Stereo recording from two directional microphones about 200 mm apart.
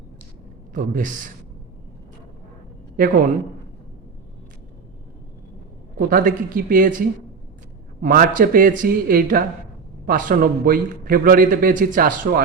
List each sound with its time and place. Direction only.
0.7 s a man's voice: 40° right (ahead or behind)
2.9 s a man's voice: 45° right (ahead or behind)
6.0 s a man's voice: 45° right (ahead or behind)
8.0 s a man's voice: 45° right (ahead or behind)